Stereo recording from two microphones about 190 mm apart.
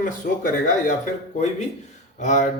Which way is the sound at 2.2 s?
40° left (ahead or behind).